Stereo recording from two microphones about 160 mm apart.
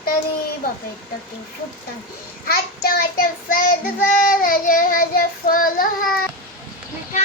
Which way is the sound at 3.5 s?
60° left (ahead or behind).